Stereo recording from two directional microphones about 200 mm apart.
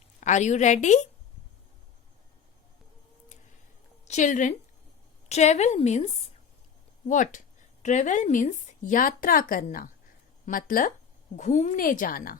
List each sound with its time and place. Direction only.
0.2 s speech: 35° left (ahead or behind)
4.0 s a woman's voice: 35° left (ahead or behind)
7.1 s speech: 40° left (ahead or behind)